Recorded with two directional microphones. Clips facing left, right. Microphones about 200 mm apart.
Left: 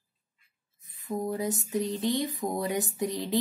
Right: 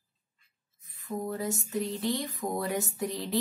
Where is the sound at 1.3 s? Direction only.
20° left (ahead or behind).